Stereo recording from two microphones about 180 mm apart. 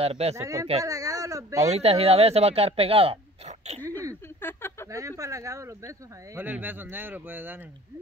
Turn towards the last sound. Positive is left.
turn(degrees=-10)  # may be behind; listen again after turning